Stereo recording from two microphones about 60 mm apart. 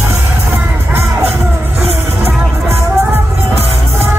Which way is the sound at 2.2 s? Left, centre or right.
Right.